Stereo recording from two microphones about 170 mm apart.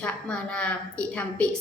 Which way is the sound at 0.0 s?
5° left (ahead or behind).